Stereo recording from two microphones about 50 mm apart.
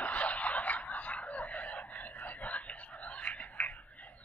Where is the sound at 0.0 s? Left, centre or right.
Left.